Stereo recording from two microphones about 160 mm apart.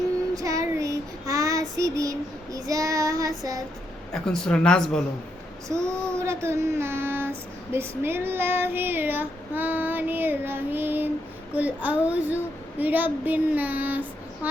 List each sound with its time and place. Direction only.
0.3 s child singing: 20° right (ahead or behind)
4.1 s speech: 5° left (ahead or behind)
6.1 s speech: 15° right (ahead or behind)